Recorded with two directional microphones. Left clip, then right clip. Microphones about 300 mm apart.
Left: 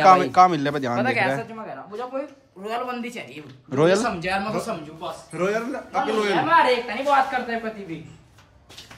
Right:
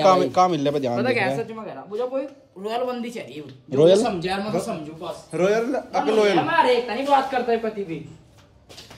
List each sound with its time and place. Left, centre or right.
0.0 s a man's voice: centre
0.9 s a man's voice: centre
4.0 s a man's voice: centre
4.5 s a man's voice: centre